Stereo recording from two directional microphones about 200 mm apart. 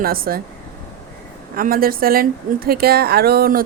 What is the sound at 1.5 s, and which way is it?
A woman's voice, 45° right (ahead or behind).